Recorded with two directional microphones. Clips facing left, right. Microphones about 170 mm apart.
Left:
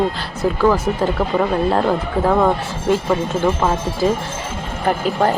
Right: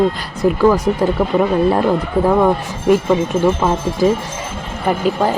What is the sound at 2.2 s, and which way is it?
Speech, 10° right (ahead or behind).